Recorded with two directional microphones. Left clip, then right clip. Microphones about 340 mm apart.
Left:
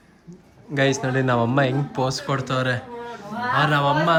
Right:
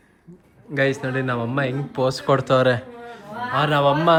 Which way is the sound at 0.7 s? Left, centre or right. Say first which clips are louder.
Even; centre.